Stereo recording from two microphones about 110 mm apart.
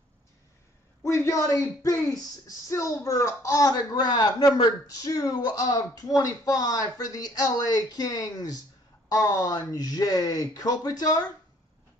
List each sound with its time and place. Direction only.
1.0 s speech: 25° left (ahead or behind)